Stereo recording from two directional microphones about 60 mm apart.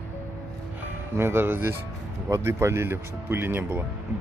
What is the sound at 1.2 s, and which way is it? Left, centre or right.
Speech, right.